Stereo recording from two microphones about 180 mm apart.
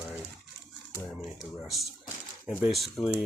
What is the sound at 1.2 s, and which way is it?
Speech, centre (ahead or behind).